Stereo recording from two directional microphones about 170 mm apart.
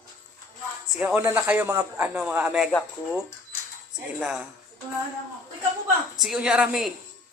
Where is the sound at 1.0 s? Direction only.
10° right (ahead or behind).